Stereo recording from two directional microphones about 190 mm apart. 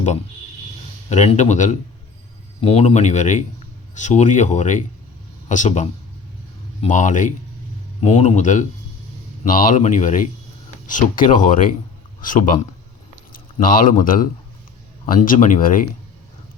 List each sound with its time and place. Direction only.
1.1 s speech: 35° left (ahead or behind)
6.9 s a man's voice: 40° left (ahead or behind)